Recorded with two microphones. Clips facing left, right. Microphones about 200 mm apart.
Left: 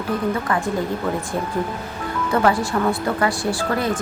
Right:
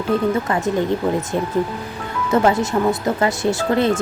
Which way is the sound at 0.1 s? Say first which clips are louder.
Right 3 dB; 25° right (ahead or behind).